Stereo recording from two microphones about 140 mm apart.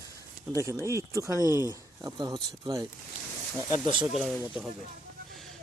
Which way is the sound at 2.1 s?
30° right (ahead or behind).